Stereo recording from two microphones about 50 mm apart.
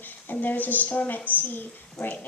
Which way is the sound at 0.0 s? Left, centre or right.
Left.